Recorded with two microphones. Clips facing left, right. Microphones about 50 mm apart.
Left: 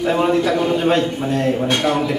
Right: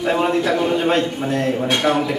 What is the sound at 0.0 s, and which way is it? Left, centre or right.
A man's voice, centre.